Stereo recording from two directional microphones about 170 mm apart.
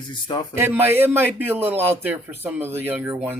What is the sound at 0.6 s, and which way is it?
A man's voice, 10° right (ahead or behind).